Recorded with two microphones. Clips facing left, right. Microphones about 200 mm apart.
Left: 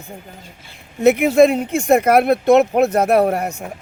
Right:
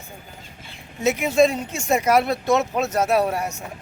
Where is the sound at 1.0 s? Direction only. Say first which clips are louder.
Left 6 dB; 60° left (ahead or behind).